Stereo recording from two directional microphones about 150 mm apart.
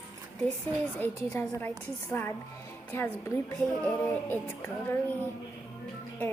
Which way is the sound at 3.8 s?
10° left (ahead or behind).